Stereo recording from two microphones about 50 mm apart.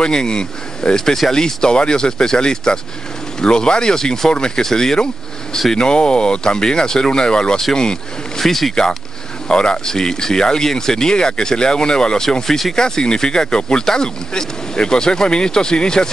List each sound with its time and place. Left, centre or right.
0.0 s speech: centre
9.5 s speech: centre